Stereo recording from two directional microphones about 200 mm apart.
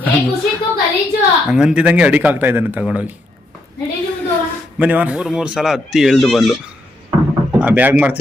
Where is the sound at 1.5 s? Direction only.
5° right (ahead or behind).